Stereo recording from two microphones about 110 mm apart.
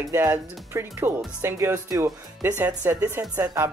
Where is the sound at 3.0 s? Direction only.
30° right (ahead or behind).